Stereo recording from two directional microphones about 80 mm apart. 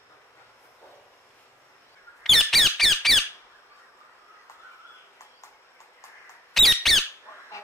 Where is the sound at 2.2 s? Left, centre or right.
Centre.